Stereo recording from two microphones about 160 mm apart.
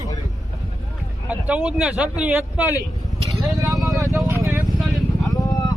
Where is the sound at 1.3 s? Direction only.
10° right (ahead or behind).